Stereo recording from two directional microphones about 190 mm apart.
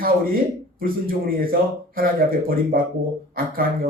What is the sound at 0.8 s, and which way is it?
Speech, 50° right (ahead or behind).